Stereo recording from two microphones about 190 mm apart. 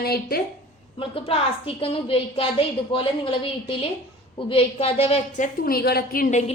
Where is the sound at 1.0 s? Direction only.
30° left (ahead or behind).